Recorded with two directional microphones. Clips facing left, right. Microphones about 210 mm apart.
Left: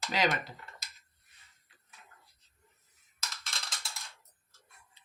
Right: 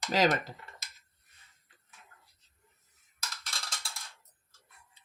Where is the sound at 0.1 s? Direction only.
40° right (ahead or behind).